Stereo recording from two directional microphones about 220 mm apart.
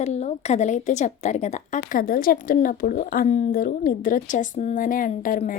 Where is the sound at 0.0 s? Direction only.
30° left (ahead or behind).